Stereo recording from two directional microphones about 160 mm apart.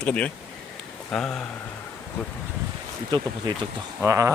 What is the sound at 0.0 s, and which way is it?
Speech, 10° left (ahead or behind).